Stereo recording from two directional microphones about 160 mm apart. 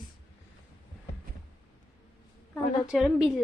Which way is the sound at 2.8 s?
5° right (ahead or behind).